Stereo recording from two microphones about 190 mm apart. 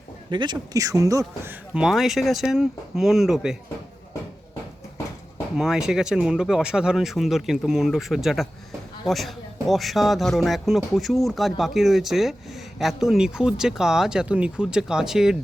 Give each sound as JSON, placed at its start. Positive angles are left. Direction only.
{"t": 0.3, "sound": "a man's voice", "side_deg": -25}
{"t": 1.2, "sound": "speech", "side_deg": -5}
{"t": 5.5, "sound": "speech", "side_deg": 0}